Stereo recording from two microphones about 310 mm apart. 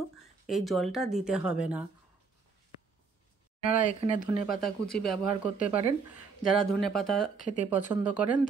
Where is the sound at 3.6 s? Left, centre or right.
Left.